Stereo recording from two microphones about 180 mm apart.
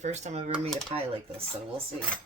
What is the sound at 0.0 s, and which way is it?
Speech, 40° right (ahead or behind).